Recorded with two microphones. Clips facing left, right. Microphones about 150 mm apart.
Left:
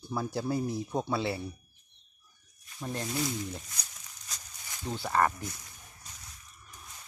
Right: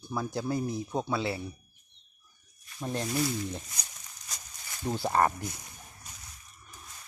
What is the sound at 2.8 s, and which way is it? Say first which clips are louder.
Speech: right 3 dB; 20° right (ahead or behind).